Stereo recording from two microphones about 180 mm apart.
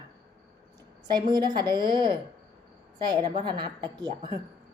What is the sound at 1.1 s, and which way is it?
A woman's voice, 25° right (ahead or behind).